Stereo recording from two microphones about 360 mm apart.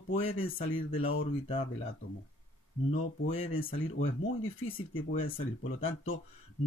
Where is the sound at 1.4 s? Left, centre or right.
Centre.